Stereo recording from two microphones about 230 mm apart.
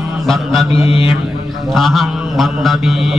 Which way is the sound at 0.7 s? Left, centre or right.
Left.